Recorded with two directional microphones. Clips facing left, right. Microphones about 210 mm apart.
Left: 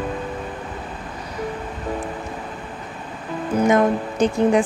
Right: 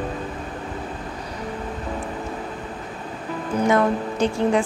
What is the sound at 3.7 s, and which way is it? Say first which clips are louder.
Speech: left 1 dB; 20° left (ahead or behind).